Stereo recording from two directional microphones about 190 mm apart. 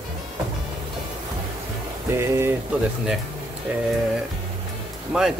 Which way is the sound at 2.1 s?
15° right (ahead or behind).